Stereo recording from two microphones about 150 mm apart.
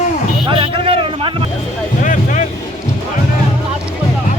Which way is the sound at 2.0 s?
60° left (ahead or behind).